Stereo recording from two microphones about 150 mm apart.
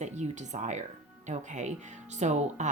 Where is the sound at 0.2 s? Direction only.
50° right (ahead or behind).